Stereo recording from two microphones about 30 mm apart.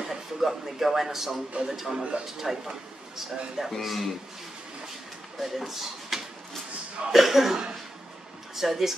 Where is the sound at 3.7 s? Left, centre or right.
Centre.